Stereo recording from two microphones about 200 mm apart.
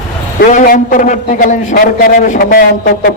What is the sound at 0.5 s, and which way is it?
A man's voice, 45° left (ahead or behind).